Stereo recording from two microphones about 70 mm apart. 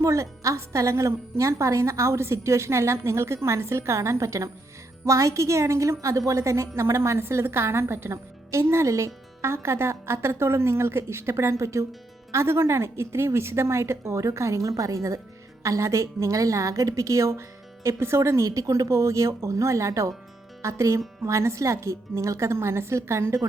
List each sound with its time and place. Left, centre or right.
0.0 s a woman's voice: right